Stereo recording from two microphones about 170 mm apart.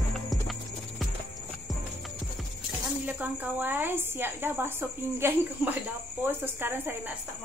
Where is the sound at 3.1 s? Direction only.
10° right (ahead or behind).